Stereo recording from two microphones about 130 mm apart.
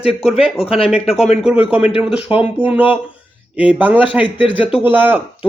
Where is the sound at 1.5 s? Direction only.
10° right (ahead or behind).